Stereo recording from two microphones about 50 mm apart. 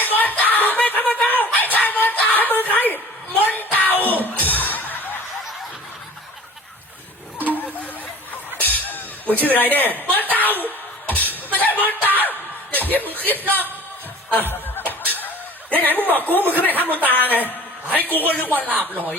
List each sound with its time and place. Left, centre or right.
0.0 s music: left
2.3 s a sound: left
4.4 s music: left
8.5 s music: left
9.3 s speech: left
10.3 s a sound: left
11.1 s music: left
15.7 s speech: left
17.9 s a sound: left
18.3 s speech: left